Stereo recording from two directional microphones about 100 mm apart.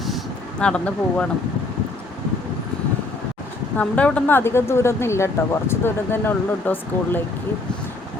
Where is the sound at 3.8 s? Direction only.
15° left (ahead or behind).